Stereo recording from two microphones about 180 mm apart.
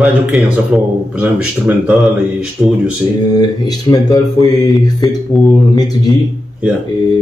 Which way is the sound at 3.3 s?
20° left (ahead or behind).